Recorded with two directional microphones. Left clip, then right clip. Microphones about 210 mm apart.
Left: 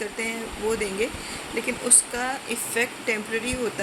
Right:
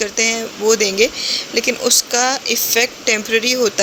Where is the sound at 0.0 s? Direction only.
40° right (ahead or behind).